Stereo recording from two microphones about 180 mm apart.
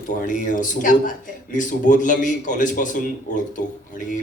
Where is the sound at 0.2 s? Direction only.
45° left (ahead or behind).